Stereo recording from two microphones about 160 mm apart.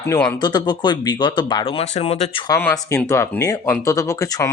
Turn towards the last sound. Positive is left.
turn(degrees=20)  # may be behind; listen again after turning